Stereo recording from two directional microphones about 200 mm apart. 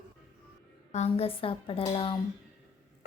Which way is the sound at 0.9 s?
30° left (ahead or behind).